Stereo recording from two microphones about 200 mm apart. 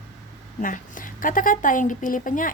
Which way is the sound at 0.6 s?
40° left (ahead or behind).